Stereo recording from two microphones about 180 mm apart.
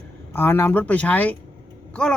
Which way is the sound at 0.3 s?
10° left (ahead or behind).